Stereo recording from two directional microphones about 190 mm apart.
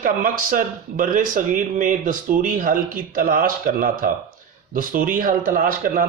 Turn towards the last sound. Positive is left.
turn(degrees=-50)  # may be behind; listen again after turning